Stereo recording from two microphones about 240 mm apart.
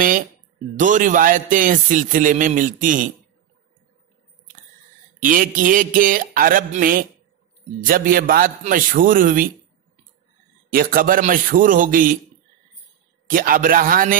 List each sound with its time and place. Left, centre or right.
0.7 s a man's voice: right
5.2 s a man's voice: right
10.7 s a man's voice: right
13.3 s a man's voice: right